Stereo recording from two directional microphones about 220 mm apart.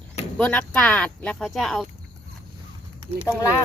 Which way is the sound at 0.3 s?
5° left (ahead or behind).